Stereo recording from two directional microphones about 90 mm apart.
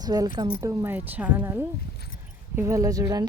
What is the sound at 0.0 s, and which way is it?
Speech, 45° right (ahead or behind).